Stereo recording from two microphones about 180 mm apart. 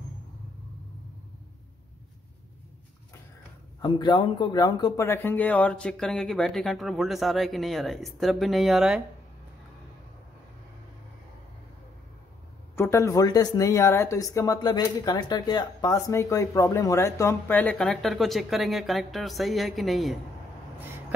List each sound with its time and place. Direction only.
3.8 s speech: 25° left (ahead or behind); by 9.0 s centre (ahead or behind)
12.7 s speech: 15° left (ahead or behind); by 20.2 s centre (ahead or behind)